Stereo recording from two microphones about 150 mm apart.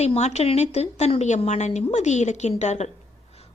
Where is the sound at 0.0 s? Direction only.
45° left (ahead or behind).